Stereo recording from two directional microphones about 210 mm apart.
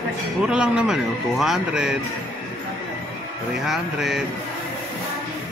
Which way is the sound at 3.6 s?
Centre (ahead or behind).